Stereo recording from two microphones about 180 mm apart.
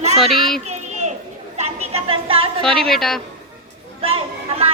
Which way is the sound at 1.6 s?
35° right (ahead or behind).